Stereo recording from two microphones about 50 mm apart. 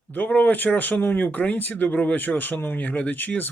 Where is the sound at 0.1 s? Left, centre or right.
Left.